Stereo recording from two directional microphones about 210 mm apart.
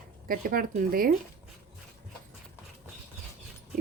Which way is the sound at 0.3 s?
45° right (ahead or behind).